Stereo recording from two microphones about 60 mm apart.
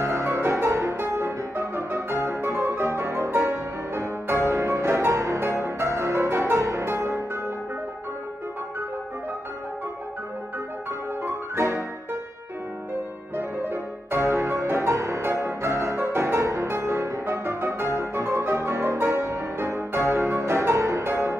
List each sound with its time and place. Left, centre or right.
0.0 s music: right
6.6 s music: right
11.2 s music: right
13.4 s music: right